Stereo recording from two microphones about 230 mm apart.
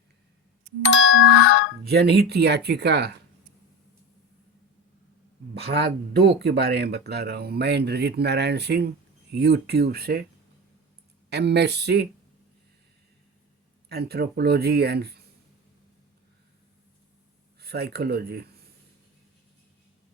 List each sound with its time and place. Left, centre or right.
0.9 s a sound: left
1.8 s speech: right
5.5 s speech: right
11.3 s speech: right
13.8 s speech: right
17.6 s speech: right